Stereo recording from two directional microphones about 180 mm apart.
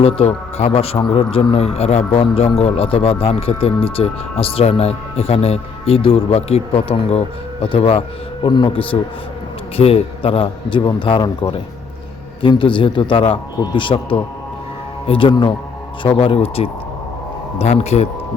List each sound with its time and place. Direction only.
0.0 s a man's voice: 35° left (ahead or behind)